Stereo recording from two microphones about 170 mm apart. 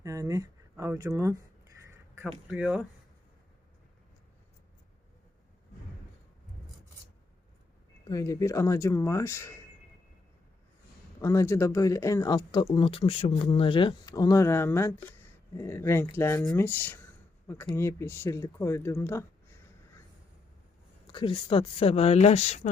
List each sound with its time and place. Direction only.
0.0 s a sound: 20° right (ahead or behind)
2.5 s speech: 5° right (ahead or behind)
8.1 s speech: 20° left (ahead or behind)
11.2 s speech: 20° left (ahead or behind)
21.1 s speech: 30° left (ahead or behind)